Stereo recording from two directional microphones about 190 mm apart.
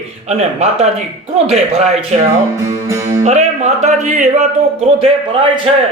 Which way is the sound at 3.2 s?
35° right (ahead or behind).